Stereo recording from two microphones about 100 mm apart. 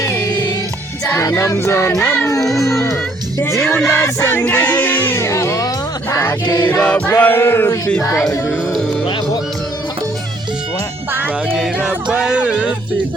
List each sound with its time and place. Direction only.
1.0 s music: 25° left (ahead or behind)
2.0 s choir: 15° left (ahead or behind)
2.3 s speech: 30° left (ahead or behind)
3.8 s music: 25° left (ahead or behind)
6.4 s choir: 45° left (ahead or behind)
6.7 s choir: 10° left (ahead or behind)
7.1 s music: 20° left (ahead or behind)
11.4 s a sound: centre (ahead or behind)
11.9 s music: 10° right (ahead or behind)